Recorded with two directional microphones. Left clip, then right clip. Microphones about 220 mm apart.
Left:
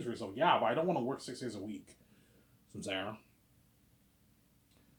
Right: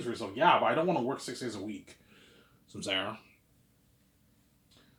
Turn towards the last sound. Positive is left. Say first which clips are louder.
# right 6 dB
turn(degrees=-10)  # may be behind; listen again after turning